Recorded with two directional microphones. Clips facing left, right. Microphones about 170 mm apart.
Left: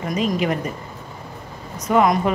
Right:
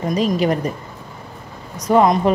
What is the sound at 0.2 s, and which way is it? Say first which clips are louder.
Speech: right 3 dB; 35° right (ahead or behind).